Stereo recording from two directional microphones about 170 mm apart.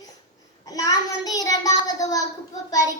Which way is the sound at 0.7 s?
20° left (ahead or behind).